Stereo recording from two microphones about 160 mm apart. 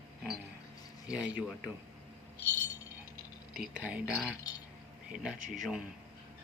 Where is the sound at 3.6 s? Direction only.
10° right (ahead or behind).